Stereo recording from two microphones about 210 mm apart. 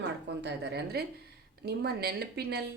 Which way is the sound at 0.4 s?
50° right (ahead or behind).